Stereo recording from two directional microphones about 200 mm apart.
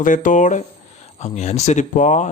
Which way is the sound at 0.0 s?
40° left (ahead or behind).